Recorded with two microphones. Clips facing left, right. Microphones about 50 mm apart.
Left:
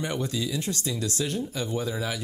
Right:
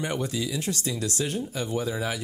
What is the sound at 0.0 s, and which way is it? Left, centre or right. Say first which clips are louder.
Speech: even; right.